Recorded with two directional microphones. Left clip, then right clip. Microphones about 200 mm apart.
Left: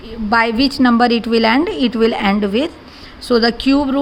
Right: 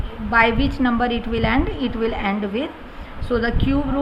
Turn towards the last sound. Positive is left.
turn(degrees=50)  # may be behind; listen again after turning